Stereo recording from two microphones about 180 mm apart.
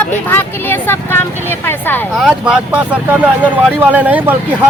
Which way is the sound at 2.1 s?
5° right (ahead or behind).